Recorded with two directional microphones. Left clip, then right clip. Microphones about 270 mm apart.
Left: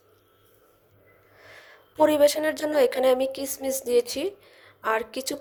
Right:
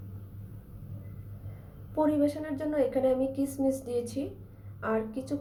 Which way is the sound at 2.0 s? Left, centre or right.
Left.